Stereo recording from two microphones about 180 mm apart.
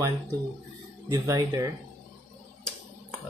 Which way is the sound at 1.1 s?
20° right (ahead or behind).